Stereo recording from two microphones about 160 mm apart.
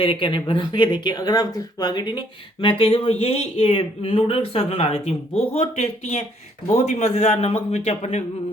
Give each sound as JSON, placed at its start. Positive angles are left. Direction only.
{"t": 0.0, "sound": "a man's voice", "side_deg": 35}